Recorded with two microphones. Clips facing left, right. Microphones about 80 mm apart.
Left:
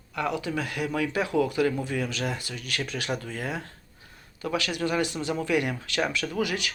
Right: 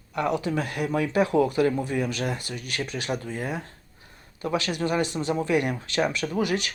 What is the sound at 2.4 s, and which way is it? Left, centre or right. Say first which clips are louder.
Speech: right 1 dB; right.